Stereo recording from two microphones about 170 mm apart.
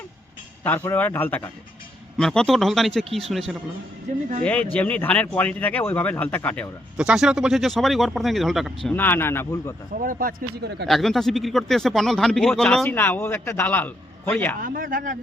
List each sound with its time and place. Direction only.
0.6 s speech: 10° left (ahead or behind)
6.9 s speech: 5° right (ahead or behind); by 9.7 s 15° left (ahead or behind)
9.9 s speech: 55° right (ahead or behind); by 10.8 s 75° right (ahead or behind)
10.8 s speech: centre (ahead or behind)
14.6 s speech: 55° right (ahead or behind)